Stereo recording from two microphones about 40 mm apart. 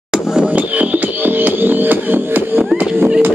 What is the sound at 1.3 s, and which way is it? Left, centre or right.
Music, right.